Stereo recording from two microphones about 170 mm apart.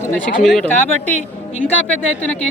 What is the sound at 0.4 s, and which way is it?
Speech, 5° left (ahead or behind).